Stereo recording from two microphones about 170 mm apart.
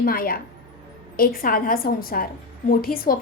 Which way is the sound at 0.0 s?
60° left (ahead or behind).